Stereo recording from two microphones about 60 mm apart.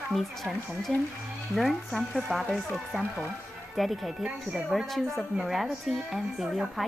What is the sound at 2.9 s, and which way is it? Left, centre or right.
Speech, right.